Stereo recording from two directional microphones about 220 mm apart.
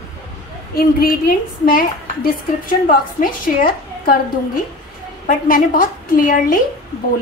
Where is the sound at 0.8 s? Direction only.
40° left (ahead or behind).